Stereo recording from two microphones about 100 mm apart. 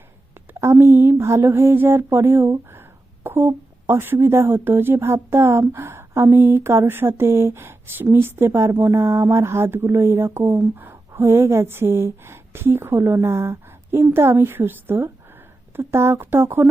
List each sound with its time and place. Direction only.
0.6 s speech: 25° right (ahead or behind)